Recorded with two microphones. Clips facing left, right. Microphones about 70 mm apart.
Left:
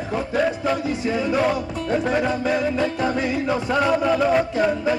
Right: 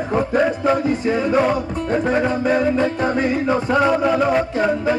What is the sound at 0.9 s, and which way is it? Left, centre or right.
Music, right.